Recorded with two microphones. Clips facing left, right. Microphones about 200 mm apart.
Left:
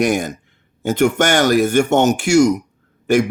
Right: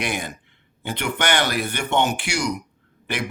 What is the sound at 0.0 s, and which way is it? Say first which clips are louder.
Speech: left 10 dB; 45° left (ahead or behind).